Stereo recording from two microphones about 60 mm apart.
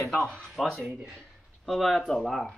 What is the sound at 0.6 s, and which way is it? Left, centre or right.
Speech, centre.